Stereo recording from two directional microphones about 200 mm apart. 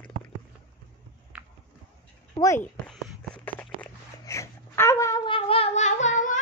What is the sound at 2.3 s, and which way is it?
Speech, 15° left (ahead or behind).